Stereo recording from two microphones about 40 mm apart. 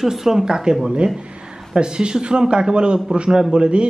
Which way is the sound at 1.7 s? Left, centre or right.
Right.